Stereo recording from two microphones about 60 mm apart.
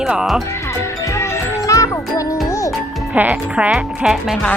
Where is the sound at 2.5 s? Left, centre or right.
Left.